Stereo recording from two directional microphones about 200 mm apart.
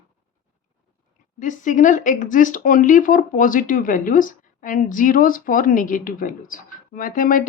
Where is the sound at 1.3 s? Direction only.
40° left (ahead or behind).